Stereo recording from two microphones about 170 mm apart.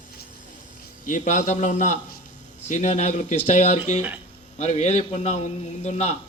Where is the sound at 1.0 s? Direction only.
45° left (ahead or behind).